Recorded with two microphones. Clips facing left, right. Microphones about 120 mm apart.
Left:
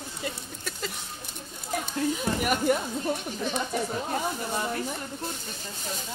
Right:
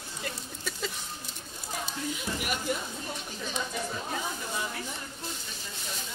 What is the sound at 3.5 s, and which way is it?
Speech, 45° left (ahead or behind).